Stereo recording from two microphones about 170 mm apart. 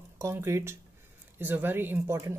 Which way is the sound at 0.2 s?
15° right (ahead or behind).